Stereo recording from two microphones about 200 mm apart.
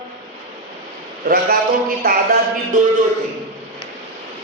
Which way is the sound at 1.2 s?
45° right (ahead or behind).